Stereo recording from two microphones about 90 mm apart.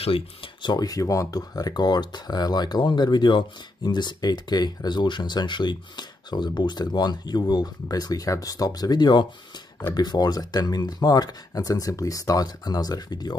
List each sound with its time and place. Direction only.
0.0 s speech: 80° left; by 0.8 s 60° left (ahead or behind)
0.8 s speech: 40° left (ahead or behind)